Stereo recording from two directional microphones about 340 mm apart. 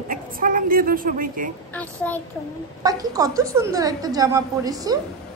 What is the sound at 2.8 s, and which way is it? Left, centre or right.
A woman's voice, centre.